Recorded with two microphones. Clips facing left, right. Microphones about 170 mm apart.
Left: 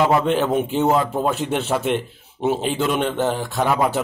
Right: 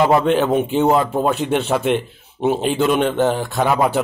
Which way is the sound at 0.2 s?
Centre (ahead or behind).